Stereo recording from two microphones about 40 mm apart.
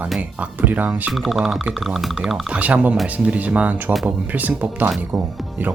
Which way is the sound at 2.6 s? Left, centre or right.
Right.